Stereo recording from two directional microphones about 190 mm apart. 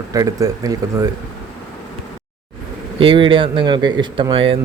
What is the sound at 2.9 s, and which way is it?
Speech, 25° right (ahead or behind).